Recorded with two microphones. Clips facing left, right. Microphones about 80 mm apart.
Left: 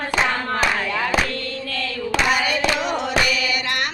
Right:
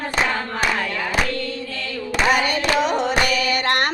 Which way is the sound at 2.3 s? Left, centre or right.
Right.